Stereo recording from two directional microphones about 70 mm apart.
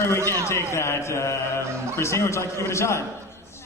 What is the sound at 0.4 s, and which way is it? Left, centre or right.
A man's voice, left.